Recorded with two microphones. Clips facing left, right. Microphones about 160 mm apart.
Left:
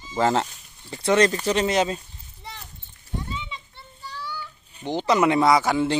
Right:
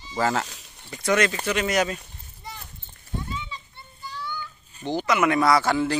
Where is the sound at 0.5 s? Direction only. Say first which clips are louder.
Right 4 dB; 90° right.